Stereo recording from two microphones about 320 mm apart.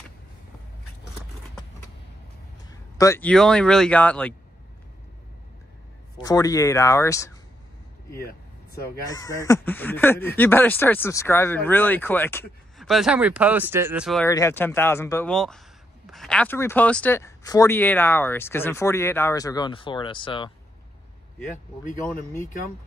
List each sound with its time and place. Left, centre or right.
3.0 s speech: centre
6.2 s speech: centre
8.2 s vehicle: left
8.8 s speech: centre